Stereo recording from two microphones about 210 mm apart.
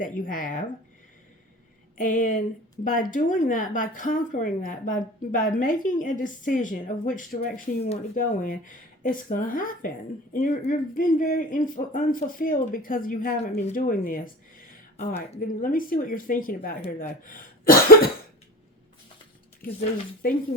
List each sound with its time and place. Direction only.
0.0 s a woman's voice: 40° left (ahead or behind)
2.0 s a woman's voice: 40° left (ahead or behind)
14.6 s a sound: 40° left (ahead or behind)
15.4 s a woman's voice: 40° left (ahead or behind)